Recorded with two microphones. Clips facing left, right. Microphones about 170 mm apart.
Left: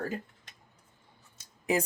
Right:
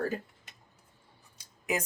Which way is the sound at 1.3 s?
30° left (ahead or behind).